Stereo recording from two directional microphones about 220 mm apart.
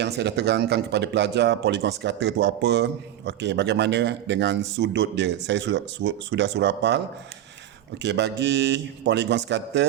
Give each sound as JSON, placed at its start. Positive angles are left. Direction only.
{"t": 0.0, "sound": "speech", "side_deg": -50}
{"t": 8.0, "sound": "speech", "side_deg": -50}